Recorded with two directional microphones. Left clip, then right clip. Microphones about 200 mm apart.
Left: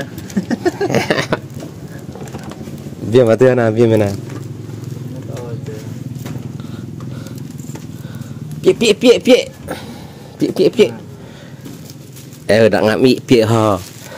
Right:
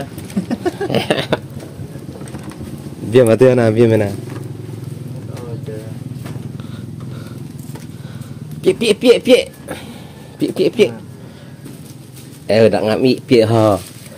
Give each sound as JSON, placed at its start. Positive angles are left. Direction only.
{"t": 0.0, "sound": "a sound", "side_deg": 20}
{"t": 0.9, "sound": "a sound", "side_deg": 5}
{"t": 3.1, "sound": "a man's voice", "side_deg": 20}
{"t": 3.3, "sound": "a man's voice", "side_deg": 5}
{"t": 8.5, "sound": "speech", "side_deg": 15}
{"t": 12.4, "sound": "speech", "side_deg": 35}